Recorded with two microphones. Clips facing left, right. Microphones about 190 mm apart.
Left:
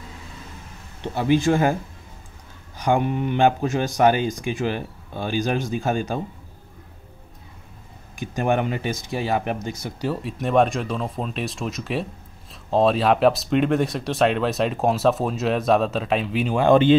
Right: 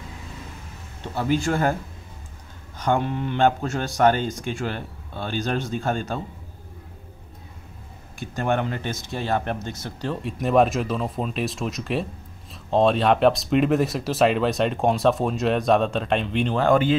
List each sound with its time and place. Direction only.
1.1 s speech: 15° left (ahead or behind)
2.8 s speech: 15° left (ahead or behind)
8.2 s speech: 15° left (ahead or behind)
16.6 s speech: 25° left (ahead or behind)